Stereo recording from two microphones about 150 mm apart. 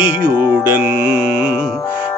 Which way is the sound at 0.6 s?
10° right (ahead or behind).